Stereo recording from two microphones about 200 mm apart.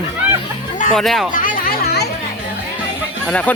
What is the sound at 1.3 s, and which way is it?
Chatter, 45° left (ahead or behind).